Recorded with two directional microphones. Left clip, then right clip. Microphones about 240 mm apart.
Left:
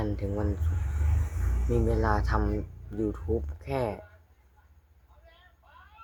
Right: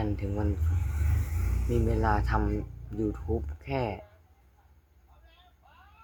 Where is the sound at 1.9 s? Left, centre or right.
Centre.